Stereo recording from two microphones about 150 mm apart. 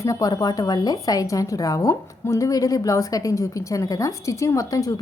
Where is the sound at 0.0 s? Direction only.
20° left (ahead or behind).